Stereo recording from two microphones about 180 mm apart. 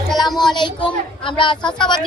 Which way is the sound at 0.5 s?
25° left (ahead or behind).